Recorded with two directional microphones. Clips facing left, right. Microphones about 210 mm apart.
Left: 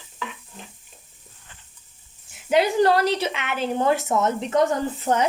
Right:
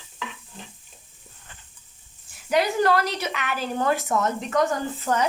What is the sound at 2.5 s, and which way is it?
A woman's voice, 30° left (ahead or behind).